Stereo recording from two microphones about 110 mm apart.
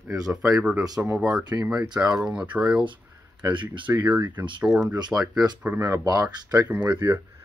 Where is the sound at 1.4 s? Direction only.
40° right (ahead or behind).